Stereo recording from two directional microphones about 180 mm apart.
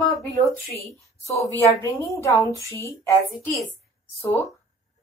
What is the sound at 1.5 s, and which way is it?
Speech, 15° left (ahead or behind).